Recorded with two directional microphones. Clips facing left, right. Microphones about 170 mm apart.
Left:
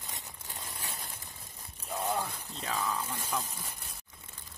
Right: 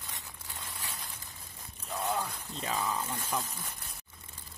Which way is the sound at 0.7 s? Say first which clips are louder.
Left 1 dB; 45° left (ahead or behind).